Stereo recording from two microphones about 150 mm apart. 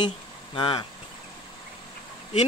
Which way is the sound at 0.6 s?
30° left (ahead or behind).